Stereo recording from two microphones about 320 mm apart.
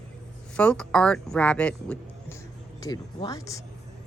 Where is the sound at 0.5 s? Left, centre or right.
Centre.